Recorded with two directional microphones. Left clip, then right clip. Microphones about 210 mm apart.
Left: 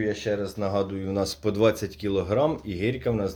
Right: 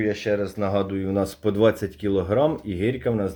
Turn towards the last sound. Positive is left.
turn(degrees=-35)  # may be behind; listen again after turning